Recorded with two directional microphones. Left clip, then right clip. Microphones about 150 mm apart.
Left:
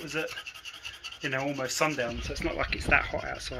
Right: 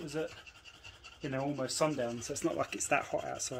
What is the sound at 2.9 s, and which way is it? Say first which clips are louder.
Speech: left 8 dB; 25° right (ahead or behind).